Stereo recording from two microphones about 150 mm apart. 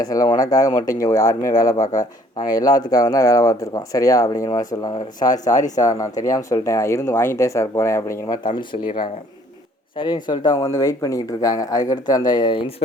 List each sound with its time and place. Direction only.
0.0 s speech: 25° left (ahead or behind)
8.4 s speech: 30° left (ahead or behind)